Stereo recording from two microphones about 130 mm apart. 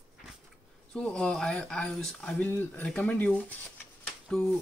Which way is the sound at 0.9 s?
5° left (ahead or behind).